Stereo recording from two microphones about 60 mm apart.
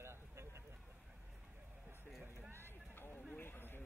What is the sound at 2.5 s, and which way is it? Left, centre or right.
Run, left.